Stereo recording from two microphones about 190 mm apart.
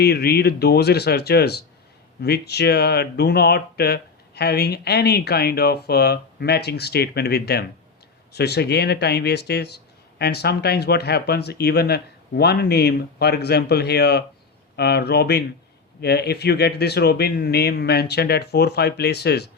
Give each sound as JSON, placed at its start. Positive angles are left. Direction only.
{"t": 0.0, "sound": "speech", "side_deg": 55}